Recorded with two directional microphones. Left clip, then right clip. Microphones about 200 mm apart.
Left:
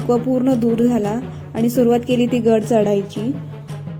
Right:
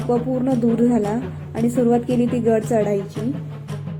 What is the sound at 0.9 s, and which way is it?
A woman's voice, 50° left (ahead or behind).